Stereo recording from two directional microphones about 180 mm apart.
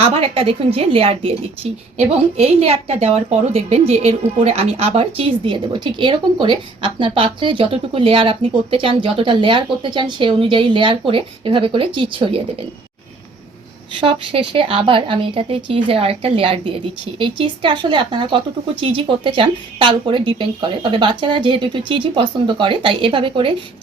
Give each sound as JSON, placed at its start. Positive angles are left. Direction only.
{"t": 0.0, "sound": "a woman's voice", "side_deg": -30}
{"t": 14.0, "sound": "speech", "side_deg": -30}